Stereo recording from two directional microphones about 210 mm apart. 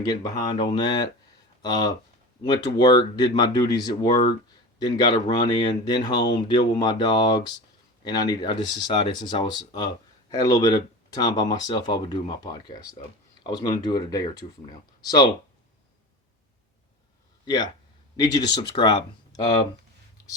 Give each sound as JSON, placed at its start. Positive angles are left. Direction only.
{"t": 0.0, "sound": "speech", "side_deg": 20}
{"t": 17.4, "sound": "speech", "side_deg": 20}